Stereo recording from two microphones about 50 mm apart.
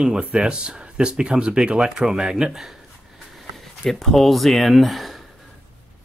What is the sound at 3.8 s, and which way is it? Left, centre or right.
Speech, centre.